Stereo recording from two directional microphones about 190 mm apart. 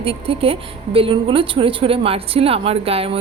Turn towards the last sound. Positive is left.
turn(degrees=-30)  # may be behind; listen again after turning